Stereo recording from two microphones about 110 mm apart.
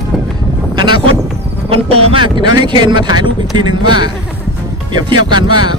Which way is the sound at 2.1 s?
45° right (ahead or behind).